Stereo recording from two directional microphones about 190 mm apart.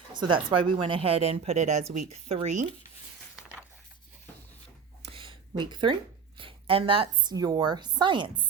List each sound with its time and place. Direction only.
0.1 s speech: 25° right (ahead or behind)
5.0 s a woman's voice: 30° right (ahead or behind)